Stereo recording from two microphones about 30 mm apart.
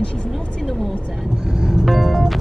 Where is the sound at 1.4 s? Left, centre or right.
Right.